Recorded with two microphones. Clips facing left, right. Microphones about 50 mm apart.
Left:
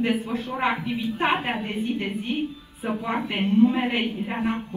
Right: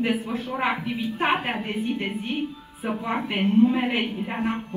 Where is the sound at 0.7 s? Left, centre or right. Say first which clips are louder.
Left 3 dB; right.